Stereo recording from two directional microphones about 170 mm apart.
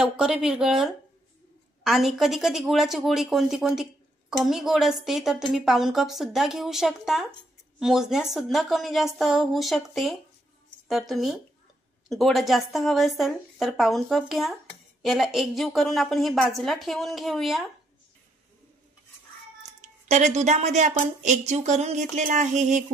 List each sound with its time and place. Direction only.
0.0 s a woman's voice: 5° right (ahead or behind)
20.1 s speech: 45° right (ahead or behind)